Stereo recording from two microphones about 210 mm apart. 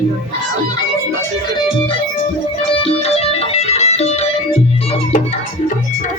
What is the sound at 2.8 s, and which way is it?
Music, 30° left (ahead or behind).